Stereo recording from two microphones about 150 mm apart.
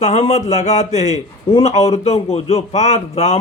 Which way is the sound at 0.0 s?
50° left (ahead or behind).